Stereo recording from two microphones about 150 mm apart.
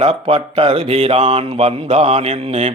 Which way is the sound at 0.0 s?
45° right (ahead or behind).